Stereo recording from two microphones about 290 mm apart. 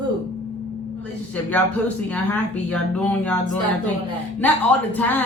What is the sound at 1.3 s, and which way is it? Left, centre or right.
Speech, centre.